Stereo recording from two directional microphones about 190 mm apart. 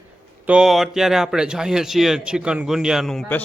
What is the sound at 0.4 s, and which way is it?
A man's voice, 5° right (ahead or behind).